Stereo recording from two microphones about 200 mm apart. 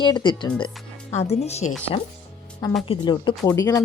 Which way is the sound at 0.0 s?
25° left (ahead or behind).